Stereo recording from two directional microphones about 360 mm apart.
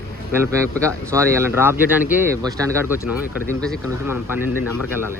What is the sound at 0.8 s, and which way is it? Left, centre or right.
Speech, centre.